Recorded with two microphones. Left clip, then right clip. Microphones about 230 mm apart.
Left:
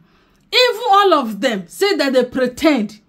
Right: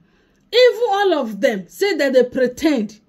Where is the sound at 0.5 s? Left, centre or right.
Centre.